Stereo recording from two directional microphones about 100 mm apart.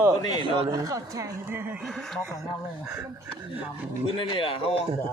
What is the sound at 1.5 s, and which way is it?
Speech, 20° right (ahead or behind).